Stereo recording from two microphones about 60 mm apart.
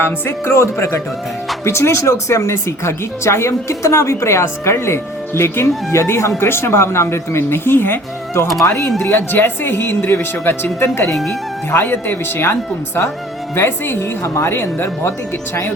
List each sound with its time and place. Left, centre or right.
0.0 s speech: left
8.4 s speech: left
9.0 s speech: left
13.6 s speech: left